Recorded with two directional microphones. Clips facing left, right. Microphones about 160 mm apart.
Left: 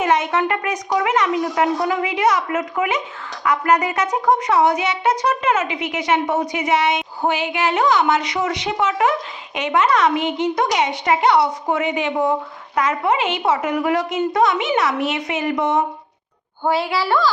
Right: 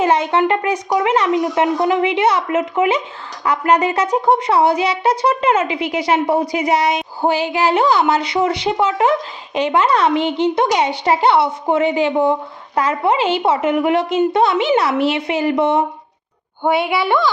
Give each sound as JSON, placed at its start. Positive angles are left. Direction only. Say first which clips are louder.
{"t": 0.0, "sound": "a woman's voice", "louder": "right 3 dB", "side_deg": -30}